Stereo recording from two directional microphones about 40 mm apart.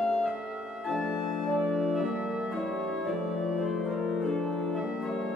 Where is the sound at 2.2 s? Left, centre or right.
Right.